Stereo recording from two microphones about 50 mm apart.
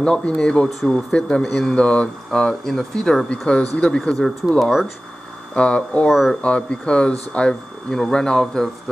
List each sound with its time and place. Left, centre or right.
0.0 s speech: centre
1.4 s speech: centre
1.8 s speech: left
2.4 s speech: centre
3.3 s speech: left
4.6 s speech: centre
5.5 s speech: left
6.0 s speech: centre
6.4 s speech: left